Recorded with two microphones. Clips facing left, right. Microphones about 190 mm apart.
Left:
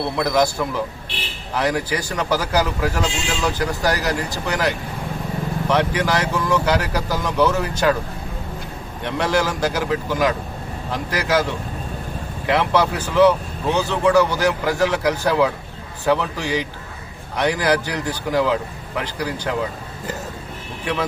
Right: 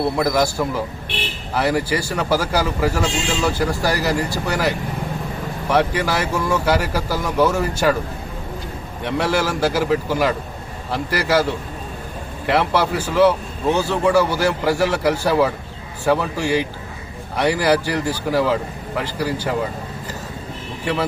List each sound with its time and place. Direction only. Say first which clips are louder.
0.2 s a man's voice: even; 10° right (ahead or behind)
9.0 s a man's voice: even; 10° right (ahead or behind)
12.5 s a man's voice: even; 10° right (ahead or behind)